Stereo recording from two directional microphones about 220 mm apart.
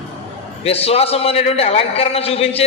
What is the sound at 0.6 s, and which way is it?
A man's voice, 25° left (ahead or behind).